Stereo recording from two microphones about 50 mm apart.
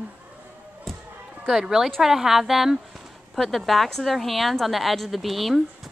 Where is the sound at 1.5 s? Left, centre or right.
Centre.